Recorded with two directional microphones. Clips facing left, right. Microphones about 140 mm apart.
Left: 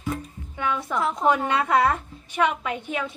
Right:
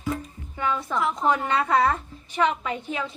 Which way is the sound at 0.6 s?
5° left (ahead or behind).